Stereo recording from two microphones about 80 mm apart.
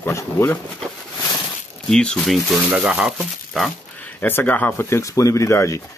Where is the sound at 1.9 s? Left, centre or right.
Centre.